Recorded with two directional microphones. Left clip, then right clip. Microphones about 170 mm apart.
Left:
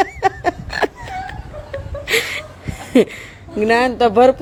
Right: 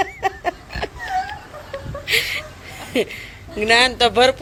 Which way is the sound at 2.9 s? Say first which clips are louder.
Left 7 dB; 70° left (ahead or behind).